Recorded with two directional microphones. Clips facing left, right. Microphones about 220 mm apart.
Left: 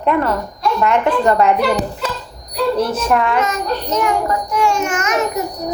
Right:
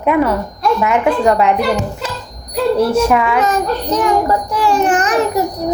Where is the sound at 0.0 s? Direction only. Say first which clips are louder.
Right 3 dB; 10° right (ahead or behind).